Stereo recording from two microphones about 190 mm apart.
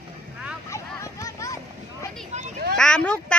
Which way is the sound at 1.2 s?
15° left (ahead or behind).